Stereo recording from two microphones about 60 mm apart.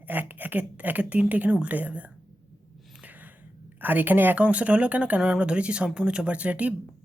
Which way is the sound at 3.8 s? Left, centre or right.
Right.